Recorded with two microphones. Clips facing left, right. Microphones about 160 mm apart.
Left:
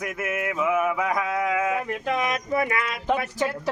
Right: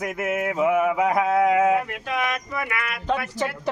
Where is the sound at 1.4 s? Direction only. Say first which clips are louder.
Right 6 dB; 30° right (ahead or behind).